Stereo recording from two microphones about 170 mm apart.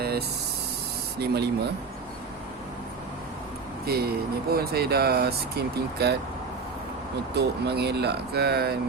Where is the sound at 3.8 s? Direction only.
65° right (ahead or behind).